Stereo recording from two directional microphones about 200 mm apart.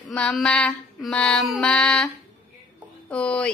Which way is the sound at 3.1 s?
5° left (ahead or behind).